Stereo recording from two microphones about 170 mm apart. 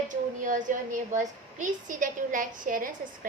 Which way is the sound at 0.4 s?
50° right (ahead or behind).